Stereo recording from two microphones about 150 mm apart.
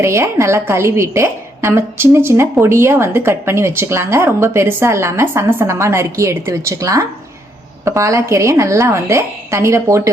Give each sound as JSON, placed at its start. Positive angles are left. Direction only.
{"t": 0.0, "sound": "a woman's voice", "side_deg": -20}